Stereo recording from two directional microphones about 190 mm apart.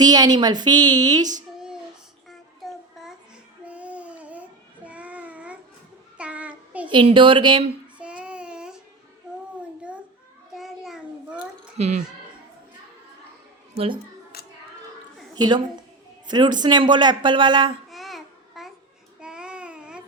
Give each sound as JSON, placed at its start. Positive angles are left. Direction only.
{"t": 0.0, "sound": "speech", "side_deg": -20}
{"t": 1.5, "sound": "child singing", "side_deg": -5}
{"t": 3.6, "sound": "babbling", "side_deg": -5}
{"t": 4.9, "sound": "a sound", "side_deg": -5}
{"t": 6.1, "sound": "child singing", "side_deg": -5}
{"t": 6.9, "sound": "speech", "side_deg": -25}
{"t": 7.9, "sound": "child singing", "side_deg": -5}
{"t": 10.5, "sound": "a sound", "side_deg": 0}
{"t": 11.8, "sound": "speech", "side_deg": -35}
{"t": 13.7, "sound": "speech", "side_deg": -30}
{"t": 14.3, "sound": "hands", "side_deg": 55}
{"t": 15.4, "sound": "speech", "side_deg": -25}
{"t": 17.9, "sound": "child singing", "side_deg": 0}